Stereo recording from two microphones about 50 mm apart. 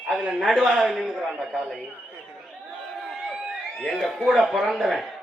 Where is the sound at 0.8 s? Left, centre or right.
Centre.